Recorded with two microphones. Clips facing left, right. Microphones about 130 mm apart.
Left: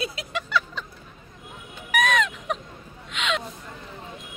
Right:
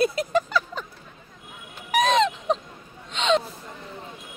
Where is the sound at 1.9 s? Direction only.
30° right (ahead or behind).